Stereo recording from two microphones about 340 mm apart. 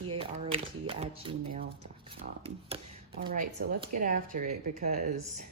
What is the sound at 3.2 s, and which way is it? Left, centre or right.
Speech, right.